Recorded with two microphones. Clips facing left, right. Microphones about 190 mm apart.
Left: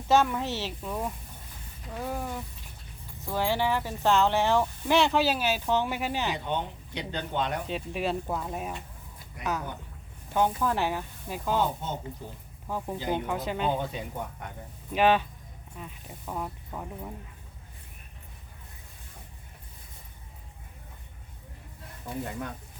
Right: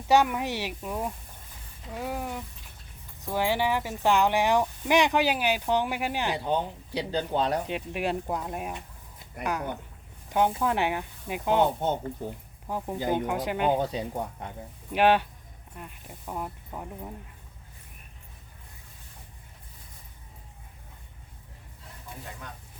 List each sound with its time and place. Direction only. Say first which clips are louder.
0.1 s speech: right 1 dB; 15° right (ahead or behind)
6.3 s speech: right 4 dB; 35° right (ahead or behind)
7.7 s speech: right 1 dB; 15° right (ahead or behind)
10.2 s speech: right 1 dB; 15° right (ahead or behind)
11.8 s speech: right 7 dB; 60° right (ahead or behind)
12.6 s speech: right 2 dB; 15° right (ahead or behind)
13.7 s speech: right 4 dB; 35° right (ahead or behind)
14.9 s speech: right 1 dB; 10° right (ahead or behind)